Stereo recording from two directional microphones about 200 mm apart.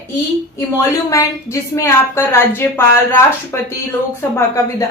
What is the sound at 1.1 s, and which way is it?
A woman's voice, 15° left (ahead or behind).